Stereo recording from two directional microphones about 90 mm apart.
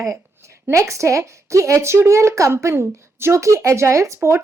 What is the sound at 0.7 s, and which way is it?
A woman's voice, 35° right (ahead or behind).